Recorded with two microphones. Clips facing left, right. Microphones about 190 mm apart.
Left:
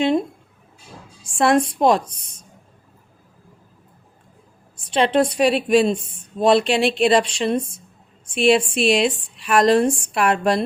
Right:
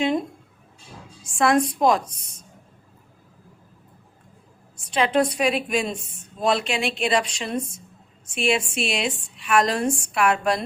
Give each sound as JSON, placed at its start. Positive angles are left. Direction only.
{"t": 1.2, "sound": "a woman's voice", "side_deg": 30}
{"t": 4.9, "sound": "a woman's voice", "side_deg": 30}